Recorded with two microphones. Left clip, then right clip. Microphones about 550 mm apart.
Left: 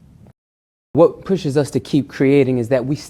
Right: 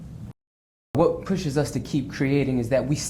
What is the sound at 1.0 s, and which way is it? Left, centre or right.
Speech, left.